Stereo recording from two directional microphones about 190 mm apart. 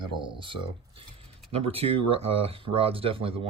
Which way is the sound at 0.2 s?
25° right (ahead or behind).